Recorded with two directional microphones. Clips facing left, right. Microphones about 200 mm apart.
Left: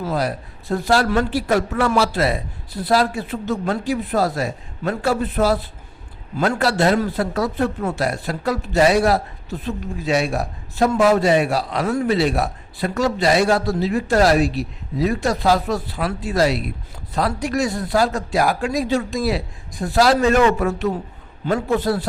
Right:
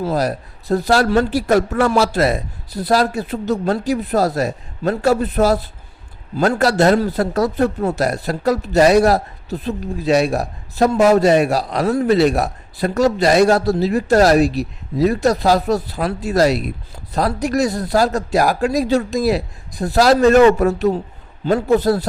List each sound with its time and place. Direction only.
0.0 s a man's voice: 40° right (ahead or behind)